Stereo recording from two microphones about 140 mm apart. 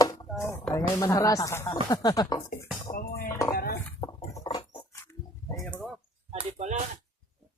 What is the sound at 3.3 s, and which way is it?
Dishes, 20° left (ahead or behind).